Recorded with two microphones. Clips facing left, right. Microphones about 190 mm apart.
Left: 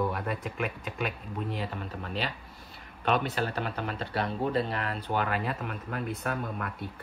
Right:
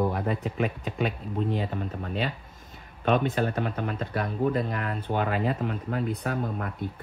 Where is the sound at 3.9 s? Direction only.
30° left (ahead or behind).